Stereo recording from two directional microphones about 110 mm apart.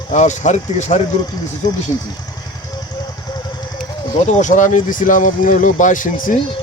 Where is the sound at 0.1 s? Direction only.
90° left.